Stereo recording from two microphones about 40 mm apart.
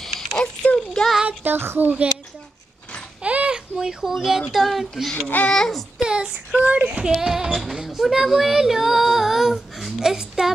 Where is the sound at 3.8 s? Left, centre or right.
Centre.